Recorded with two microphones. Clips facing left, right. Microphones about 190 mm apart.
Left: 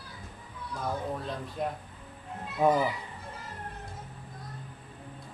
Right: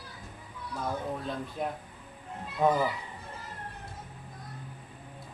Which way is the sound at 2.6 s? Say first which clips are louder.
Left 1 dB; 10° left (ahead or behind).